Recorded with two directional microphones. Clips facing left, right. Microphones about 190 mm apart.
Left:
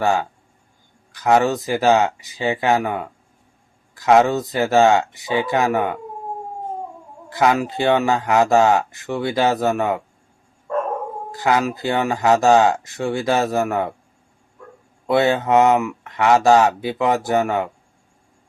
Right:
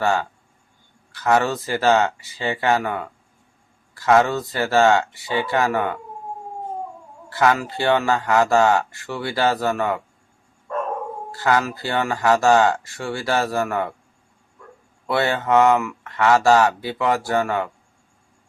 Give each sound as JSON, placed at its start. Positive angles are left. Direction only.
{"t": 0.0, "sound": "speech", "side_deg": 15}
{"t": 7.3, "sound": "speech", "side_deg": 15}
{"t": 11.3, "sound": "speech", "side_deg": 15}
{"t": 15.0, "sound": "speech", "side_deg": 20}